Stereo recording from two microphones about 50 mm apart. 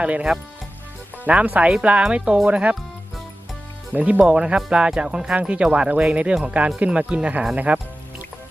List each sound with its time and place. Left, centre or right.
0.0 s speech: right
3.9 s speech: right
4.3 s speech: centre
5.4 s speech: right